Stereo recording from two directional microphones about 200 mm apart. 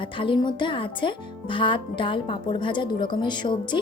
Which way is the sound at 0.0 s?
25° left (ahead or behind).